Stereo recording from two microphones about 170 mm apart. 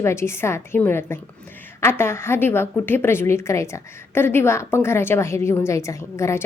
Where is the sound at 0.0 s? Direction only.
15° left (ahead or behind).